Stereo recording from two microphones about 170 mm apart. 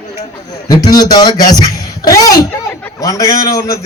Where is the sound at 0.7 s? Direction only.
20° left (ahead or behind).